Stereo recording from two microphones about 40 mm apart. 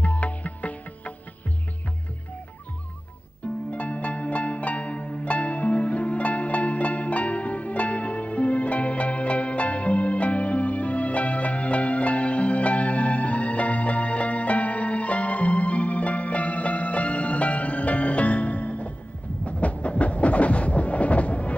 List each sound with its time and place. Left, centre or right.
0.0 s music: left
3.7 s music: left
19.4 s a sound: left